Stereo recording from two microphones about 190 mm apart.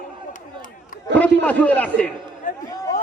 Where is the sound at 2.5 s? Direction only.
45° left (ahead or behind).